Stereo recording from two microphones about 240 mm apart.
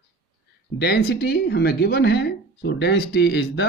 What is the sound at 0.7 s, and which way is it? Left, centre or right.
Speech, left.